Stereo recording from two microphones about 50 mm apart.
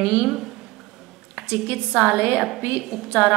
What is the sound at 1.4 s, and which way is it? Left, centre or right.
Speech, right.